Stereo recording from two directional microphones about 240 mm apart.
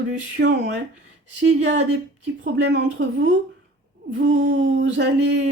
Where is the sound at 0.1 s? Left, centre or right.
Right.